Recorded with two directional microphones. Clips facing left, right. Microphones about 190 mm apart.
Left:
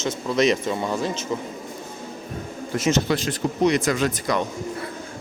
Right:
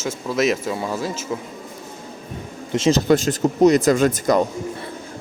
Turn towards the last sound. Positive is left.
turn(degrees=-45)  # may be behind; listen again after turning